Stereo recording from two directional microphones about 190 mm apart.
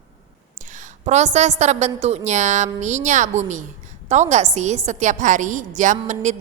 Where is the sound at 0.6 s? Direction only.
40° right (ahead or behind).